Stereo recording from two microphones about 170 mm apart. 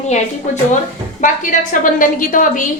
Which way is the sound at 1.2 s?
50° left (ahead or behind).